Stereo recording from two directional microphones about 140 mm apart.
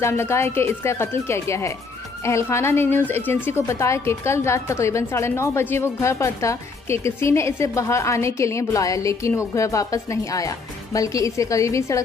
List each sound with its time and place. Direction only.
0.0 s a woman's voice: 20° left (ahead or behind)